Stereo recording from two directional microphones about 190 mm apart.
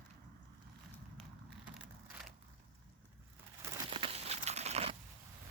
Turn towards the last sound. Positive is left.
turn(degrees=-35)  # may be behind; listen again after turning